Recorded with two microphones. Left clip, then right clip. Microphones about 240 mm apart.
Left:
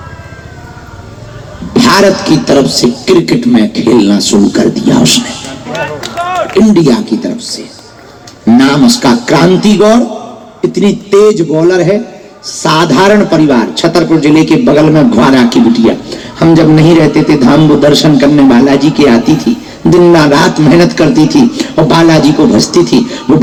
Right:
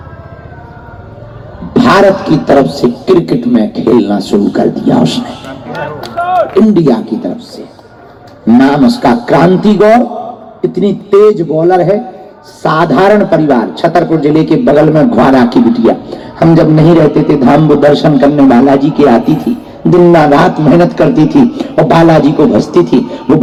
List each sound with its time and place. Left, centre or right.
1.7 s speech: left
6.5 s speech: left
8.5 s speech: left
19.9 s speech: left
20.3 s speech: left